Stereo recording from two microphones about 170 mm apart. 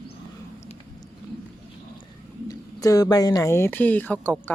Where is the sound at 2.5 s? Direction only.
20° left (ahead or behind).